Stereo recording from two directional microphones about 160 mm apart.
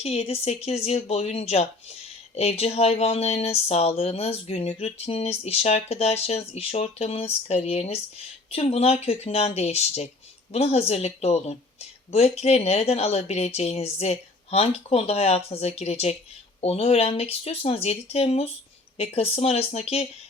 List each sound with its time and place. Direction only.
0.0 s speech: 40° left (ahead or behind)